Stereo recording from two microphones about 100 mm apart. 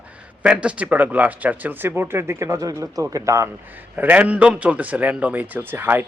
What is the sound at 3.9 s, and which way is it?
A man's voice, 15° right (ahead or behind).